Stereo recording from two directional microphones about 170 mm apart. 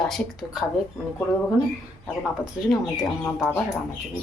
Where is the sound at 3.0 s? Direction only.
5° right (ahead or behind).